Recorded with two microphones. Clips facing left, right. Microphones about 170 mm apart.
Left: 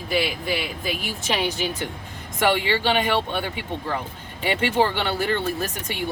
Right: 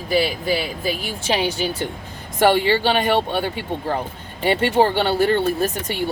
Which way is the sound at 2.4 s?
35° right (ahead or behind).